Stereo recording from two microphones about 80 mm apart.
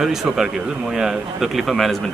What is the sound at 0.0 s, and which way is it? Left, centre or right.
Speech, centre.